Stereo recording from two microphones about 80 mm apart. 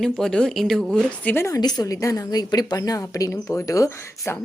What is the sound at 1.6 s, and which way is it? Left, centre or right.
A woman's voice, left.